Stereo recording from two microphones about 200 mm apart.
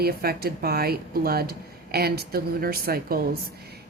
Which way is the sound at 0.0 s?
50° right (ahead or behind).